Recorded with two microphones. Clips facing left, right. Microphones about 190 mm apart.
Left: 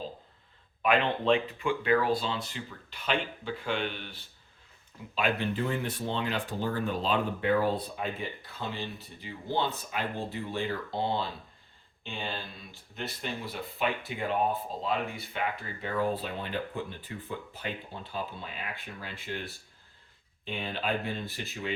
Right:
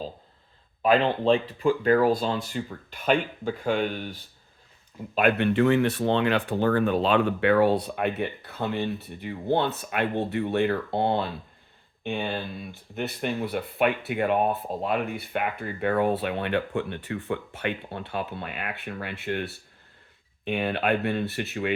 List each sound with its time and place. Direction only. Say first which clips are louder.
0.8 s speech: right 5 dB; 35° right (ahead or behind)
5.1 s speech: right 8 dB; 60° right (ahead or behind)